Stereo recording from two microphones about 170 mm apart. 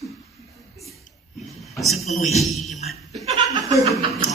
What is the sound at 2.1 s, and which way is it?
Speech, 40° left (ahead or behind).